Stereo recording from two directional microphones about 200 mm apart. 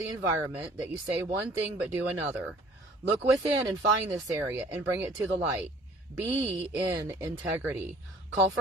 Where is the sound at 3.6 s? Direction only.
20° right (ahead or behind).